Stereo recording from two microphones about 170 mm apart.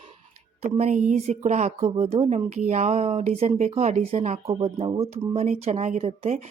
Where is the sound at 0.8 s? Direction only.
45° right (ahead or behind).